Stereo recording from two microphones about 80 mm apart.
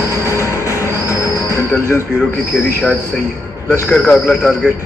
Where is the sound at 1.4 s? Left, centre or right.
Left.